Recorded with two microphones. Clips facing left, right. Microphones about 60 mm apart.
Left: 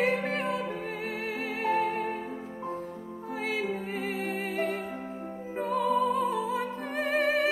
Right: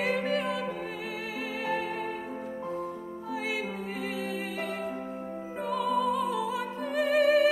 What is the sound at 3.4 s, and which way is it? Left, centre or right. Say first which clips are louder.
Music: left 4 dB; left.